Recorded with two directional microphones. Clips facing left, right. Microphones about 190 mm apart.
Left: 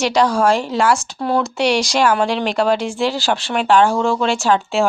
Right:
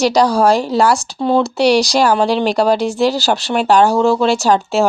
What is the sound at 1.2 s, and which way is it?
Speech, 25° right (ahead or behind).